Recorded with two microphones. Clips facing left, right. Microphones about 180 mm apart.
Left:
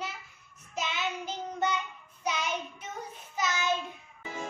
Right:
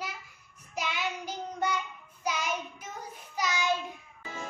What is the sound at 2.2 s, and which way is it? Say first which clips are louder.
Child singing: even; 10° right (ahead or behind).